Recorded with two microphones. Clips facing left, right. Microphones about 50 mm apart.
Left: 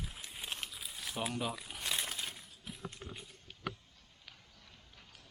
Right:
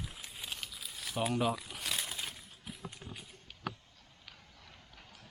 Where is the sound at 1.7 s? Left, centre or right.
Centre.